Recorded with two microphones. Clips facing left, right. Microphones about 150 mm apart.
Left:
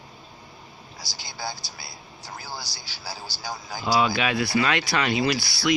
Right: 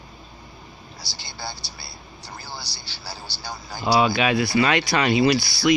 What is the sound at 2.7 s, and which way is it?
Speech, 45° left (ahead or behind).